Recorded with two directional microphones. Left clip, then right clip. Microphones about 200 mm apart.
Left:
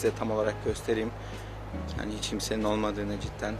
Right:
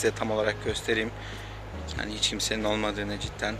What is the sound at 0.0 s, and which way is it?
Speech, centre (ahead or behind).